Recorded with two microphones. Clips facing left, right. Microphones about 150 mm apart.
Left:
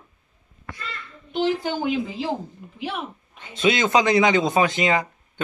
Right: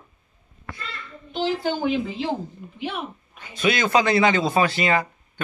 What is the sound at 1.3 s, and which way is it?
Speech, 15° left (ahead or behind).